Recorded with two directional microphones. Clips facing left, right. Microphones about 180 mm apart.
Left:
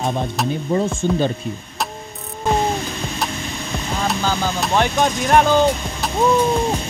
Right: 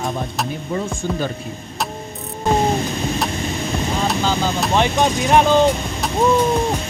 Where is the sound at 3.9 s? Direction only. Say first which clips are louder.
Left 1 dB; centre (ahead or behind).